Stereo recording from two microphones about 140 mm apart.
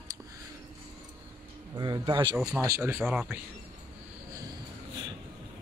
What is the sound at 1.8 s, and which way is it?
Speech, 35° right (ahead or behind).